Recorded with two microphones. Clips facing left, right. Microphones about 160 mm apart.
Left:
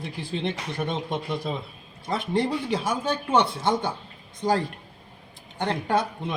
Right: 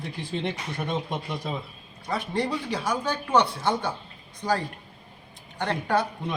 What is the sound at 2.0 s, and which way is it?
A man's voice, 25° left (ahead or behind).